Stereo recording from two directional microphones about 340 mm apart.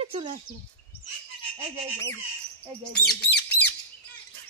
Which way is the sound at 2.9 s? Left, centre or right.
Centre.